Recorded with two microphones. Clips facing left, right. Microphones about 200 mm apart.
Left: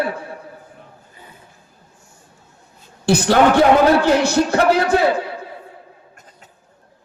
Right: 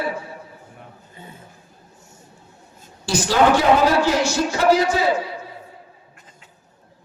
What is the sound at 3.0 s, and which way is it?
A man's voice, 60° left (ahead or behind).